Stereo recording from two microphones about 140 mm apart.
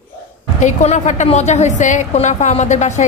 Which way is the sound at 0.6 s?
55° left (ahead or behind).